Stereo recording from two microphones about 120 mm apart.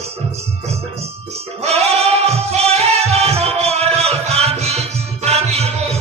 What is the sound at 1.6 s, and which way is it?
Music, 60° right (ahead or behind).